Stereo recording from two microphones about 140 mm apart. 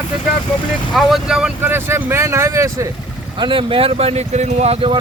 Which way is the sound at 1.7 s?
15° right (ahead or behind).